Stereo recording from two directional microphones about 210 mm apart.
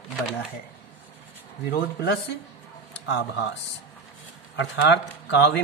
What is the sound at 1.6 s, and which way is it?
Speech, 50° left (ahead or behind).